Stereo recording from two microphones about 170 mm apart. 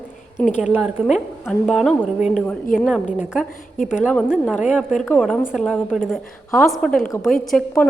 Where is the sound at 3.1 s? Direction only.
10° right (ahead or behind).